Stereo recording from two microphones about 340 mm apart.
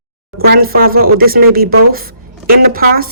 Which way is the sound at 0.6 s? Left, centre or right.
Right.